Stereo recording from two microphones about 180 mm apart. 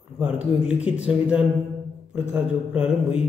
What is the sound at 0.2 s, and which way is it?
Speech, 5° right (ahead or behind).